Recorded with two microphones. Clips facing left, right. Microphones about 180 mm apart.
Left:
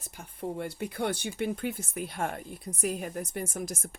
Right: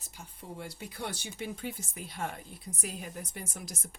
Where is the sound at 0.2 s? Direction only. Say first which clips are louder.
Left 9 dB; 55° left (ahead or behind).